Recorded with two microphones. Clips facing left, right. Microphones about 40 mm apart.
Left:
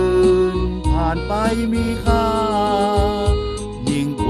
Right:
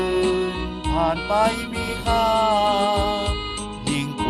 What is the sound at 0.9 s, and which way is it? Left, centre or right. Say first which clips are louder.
Speech: right 1 dB; centre.